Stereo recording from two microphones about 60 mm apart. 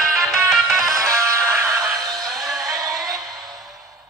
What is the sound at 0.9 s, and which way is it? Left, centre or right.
Music, right.